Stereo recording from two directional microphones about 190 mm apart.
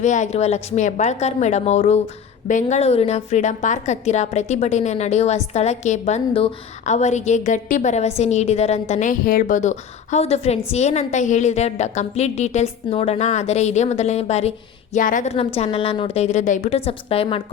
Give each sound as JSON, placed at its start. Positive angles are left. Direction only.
{"t": 0.0, "sound": "a woman's voice", "side_deg": 40}